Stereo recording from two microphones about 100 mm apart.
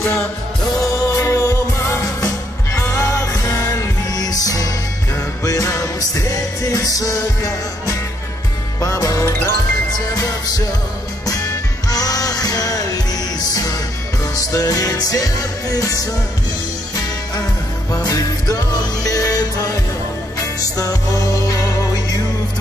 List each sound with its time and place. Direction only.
0.7 s music: 30° left (ahead or behind)
11.9 s music: 40° left (ahead or behind)
14.3 s music: 35° left (ahead or behind)
17.9 s music: 35° left (ahead or behind)
20.7 s music: 35° left (ahead or behind)